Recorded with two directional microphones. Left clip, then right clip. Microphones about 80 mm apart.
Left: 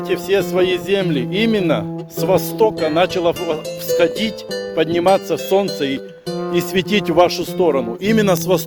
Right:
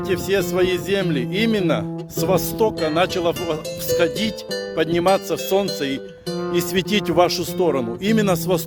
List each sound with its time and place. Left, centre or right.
0.1 s speech: right
2.2 s speech: right
4.8 s speech: right
6.5 s speech: right